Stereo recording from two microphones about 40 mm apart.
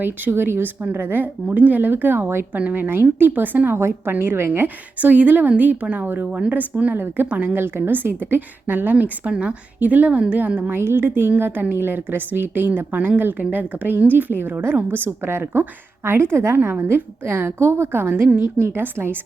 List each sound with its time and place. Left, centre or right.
0.0 s speech: right
1.5 s a woman's voice: right
3.8 s a woman's voice: right
4.1 s speech: right
4.9 s a woman's voice: right
6.9 s speech: right
7.3 s a woman's voice: right
7.5 s a woman's voice: right
10.7 s a woman's voice: right
11.1 s a woman's voice: right
16.0 s a woman's voice: right
16.7 s a woman's voice: right
18.6 s a woman's voice: right